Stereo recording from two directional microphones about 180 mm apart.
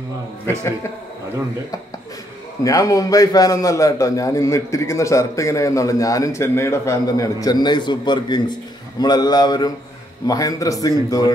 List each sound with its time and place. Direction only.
2.6 s a man's voice: 20° left (ahead or behind)